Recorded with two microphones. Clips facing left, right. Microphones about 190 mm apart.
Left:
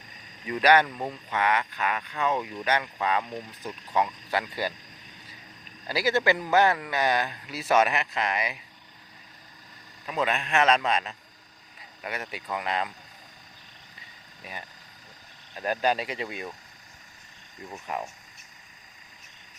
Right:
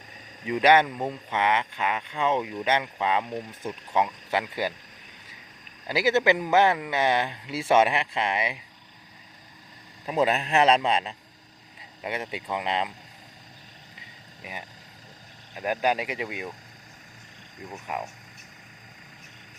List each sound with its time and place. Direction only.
0.4 s speech: 20° right (ahead or behind)
5.9 s speech: 20° right (ahead or behind)
10.1 s speech: 30° right (ahead or behind)
14.4 s speech: 20° right (ahead or behind)
17.7 s speech: 10° right (ahead or behind)